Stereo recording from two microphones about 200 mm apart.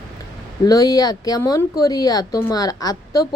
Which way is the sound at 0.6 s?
20° left (ahead or behind).